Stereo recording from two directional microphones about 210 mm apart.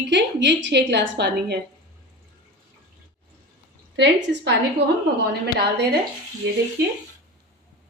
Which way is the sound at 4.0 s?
55° right (ahead or behind).